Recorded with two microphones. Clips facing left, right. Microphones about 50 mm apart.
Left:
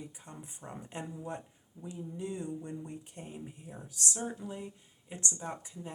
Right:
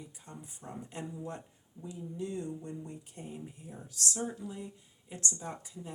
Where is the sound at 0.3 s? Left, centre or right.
Left.